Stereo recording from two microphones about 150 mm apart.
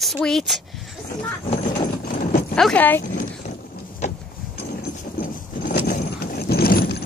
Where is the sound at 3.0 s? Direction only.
60° left (ahead or behind).